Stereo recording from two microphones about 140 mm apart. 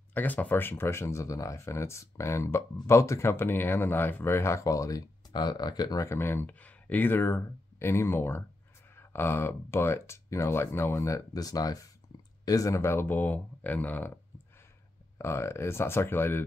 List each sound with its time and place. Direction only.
0.1 s speech: 10° left (ahead or behind)
15.1 s speech: 20° left (ahead or behind)